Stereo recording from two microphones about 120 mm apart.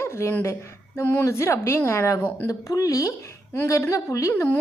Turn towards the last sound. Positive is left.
turn(degrees=20)  # may be behind; listen again after turning